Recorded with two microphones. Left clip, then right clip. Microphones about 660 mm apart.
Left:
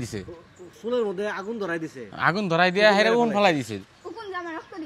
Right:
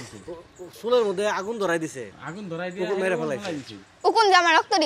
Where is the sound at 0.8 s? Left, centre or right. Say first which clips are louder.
Right 4 dB; right.